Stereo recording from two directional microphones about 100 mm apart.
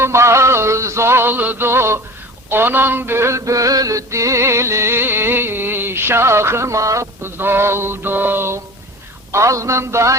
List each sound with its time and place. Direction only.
0.0 s mantra: 30° right (ahead or behind)